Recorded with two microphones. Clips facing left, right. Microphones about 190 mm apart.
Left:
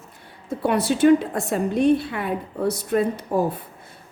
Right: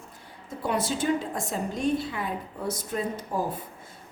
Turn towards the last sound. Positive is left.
turn(degrees=65)  # may be behind; listen again after turning